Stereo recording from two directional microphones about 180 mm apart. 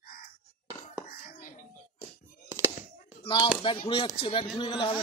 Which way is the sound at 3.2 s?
30° left (ahead or behind).